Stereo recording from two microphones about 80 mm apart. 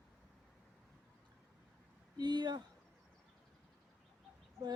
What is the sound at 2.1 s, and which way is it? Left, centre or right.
Speech, right.